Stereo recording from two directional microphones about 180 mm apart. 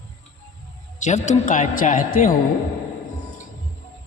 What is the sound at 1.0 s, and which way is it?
A man's voice, 40° left (ahead or behind).